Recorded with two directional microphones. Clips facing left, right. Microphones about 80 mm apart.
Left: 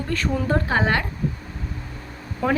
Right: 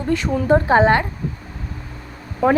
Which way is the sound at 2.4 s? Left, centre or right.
Centre.